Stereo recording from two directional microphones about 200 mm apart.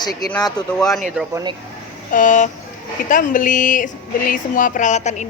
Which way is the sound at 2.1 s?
40° left (ahead or behind).